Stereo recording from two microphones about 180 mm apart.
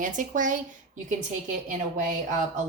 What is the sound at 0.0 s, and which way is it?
Speech, 45° right (ahead or behind).